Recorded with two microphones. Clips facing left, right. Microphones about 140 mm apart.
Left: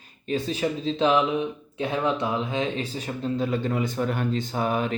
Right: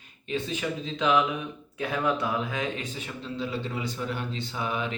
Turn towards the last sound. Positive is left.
turn(degrees=45)  # may be behind; listen again after turning